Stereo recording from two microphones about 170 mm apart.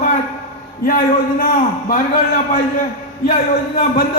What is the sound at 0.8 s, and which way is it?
Speech, 55° left (ahead or behind).